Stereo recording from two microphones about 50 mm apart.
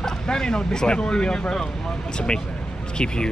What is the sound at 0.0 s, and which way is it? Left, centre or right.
Speech, centre.